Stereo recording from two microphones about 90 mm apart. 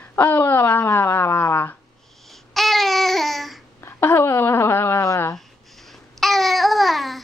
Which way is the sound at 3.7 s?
30° left (ahead or behind).